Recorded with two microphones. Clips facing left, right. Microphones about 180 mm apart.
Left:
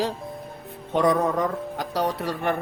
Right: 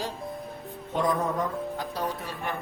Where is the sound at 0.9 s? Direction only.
75° left (ahead or behind).